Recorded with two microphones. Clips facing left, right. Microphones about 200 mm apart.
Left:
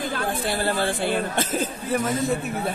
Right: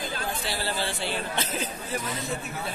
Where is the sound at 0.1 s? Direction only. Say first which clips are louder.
Left 6 dB; 55° left (ahead or behind).